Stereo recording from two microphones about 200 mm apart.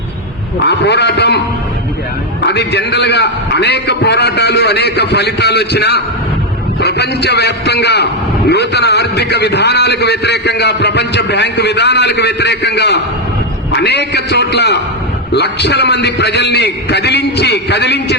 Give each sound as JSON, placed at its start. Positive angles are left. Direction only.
{"t": 0.7, "sound": "a man's voice", "side_deg": 60}
{"t": 2.5, "sound": "a man's voice", "side_deg": 60}